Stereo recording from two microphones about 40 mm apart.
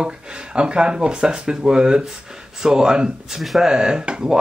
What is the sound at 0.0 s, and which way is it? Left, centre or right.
Speech, right.